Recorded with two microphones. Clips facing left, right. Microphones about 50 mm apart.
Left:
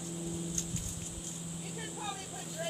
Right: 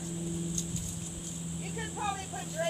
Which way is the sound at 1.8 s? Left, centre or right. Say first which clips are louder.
Right 7 dB; right.